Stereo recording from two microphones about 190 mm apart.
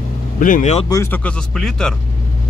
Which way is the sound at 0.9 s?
10° left (ahead or behind).